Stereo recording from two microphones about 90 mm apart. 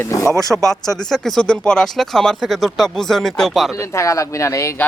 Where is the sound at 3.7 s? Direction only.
30° left (ahead or behind).